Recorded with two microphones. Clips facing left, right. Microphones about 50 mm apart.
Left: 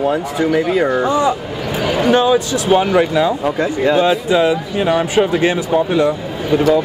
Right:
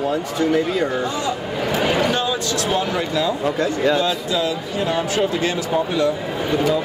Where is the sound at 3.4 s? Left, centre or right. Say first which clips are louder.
Left 3 dB; centre.